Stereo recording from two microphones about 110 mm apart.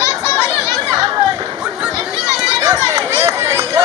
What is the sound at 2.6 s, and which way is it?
Run, 25° right (ahead or behind).